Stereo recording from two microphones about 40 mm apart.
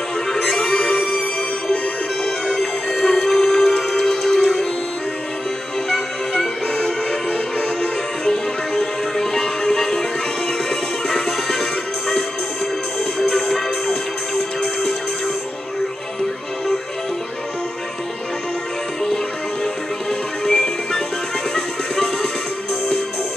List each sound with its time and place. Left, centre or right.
0.3 s music: centre
0.7 s music: left
2.2 s music: centre
5.9 s music: centre
8.3 s music: centre
13.3 s music: centre
19.6 s music: centre